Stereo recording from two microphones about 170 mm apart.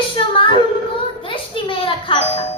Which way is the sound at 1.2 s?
30° left (ahead or behind).